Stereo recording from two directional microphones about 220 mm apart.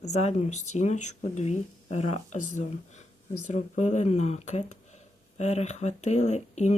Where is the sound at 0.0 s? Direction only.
30° left (ahead or behind).